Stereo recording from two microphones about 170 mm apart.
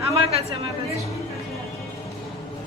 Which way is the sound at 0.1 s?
35° right (ahead or behind).